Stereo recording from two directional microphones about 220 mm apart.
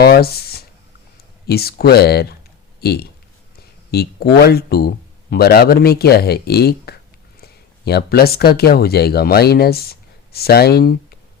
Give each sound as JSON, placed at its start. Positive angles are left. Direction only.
{"t": 0.0, "sound": "speech", "side_deg": 45}